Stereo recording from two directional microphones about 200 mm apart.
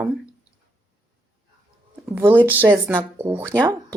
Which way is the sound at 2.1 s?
10° right (ahead or behind).